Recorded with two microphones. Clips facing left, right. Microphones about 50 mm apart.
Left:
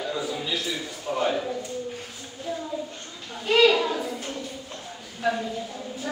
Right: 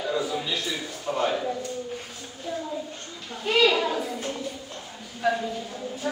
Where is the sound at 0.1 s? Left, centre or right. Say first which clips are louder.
Right 5 dB; centre.